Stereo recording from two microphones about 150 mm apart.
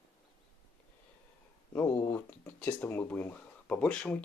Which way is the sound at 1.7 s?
15° left (ahead or behind).